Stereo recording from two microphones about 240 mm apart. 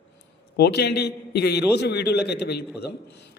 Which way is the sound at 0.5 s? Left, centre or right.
Left.